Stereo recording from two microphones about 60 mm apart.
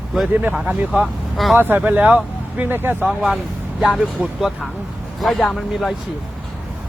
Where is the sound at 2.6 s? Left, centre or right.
Right.